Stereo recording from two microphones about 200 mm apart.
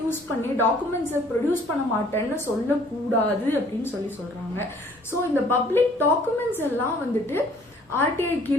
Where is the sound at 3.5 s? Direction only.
10° left (ahead or behind).